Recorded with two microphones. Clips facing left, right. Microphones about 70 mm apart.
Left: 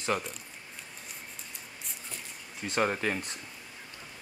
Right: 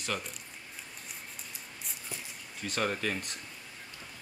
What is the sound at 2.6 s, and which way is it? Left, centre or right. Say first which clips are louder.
Speech: left 3 dB; left.